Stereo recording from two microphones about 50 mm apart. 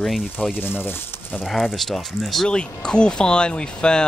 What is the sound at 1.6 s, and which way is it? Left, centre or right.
Speech, centre.